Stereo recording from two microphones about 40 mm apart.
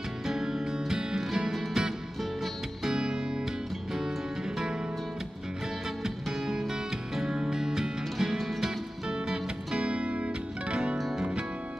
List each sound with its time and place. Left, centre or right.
0.3 s music: centre
6.0 s music: centre; by 11.0 s right
11.0 s music: centre